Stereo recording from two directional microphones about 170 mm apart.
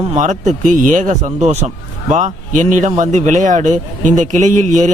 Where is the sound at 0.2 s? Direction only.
45° right (ahead or behind).